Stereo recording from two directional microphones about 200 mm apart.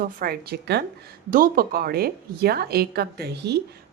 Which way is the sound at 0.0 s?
45° right (ahead or behind).